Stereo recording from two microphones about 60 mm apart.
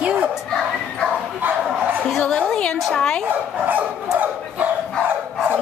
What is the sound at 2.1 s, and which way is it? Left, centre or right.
A woman's voice, centre.